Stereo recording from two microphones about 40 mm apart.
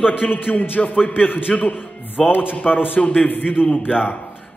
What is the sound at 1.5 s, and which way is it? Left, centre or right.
Speech, left.